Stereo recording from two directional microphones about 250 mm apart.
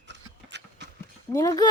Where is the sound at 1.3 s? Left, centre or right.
Centre.